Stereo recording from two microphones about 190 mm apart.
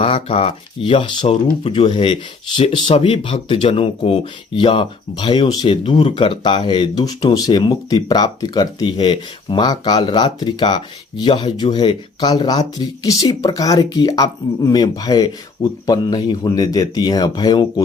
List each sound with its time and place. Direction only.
0.0 s speech: 30° left (ahead or behind)